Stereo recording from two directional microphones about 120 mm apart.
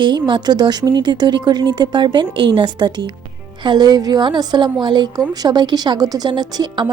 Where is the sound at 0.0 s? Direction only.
40° right (ahead or behind).